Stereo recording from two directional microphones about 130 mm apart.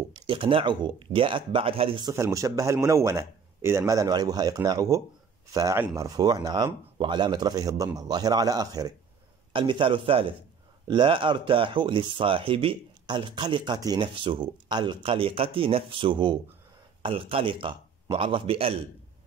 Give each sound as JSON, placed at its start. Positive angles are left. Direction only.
{"t": 0.1, "sound": "speech", "side_deg": -40}
{"t": 2.1, "sound": "speech", "side_deg": -25}
{"t": 9.5, "sound": "a man's voice", "side_deg": -40}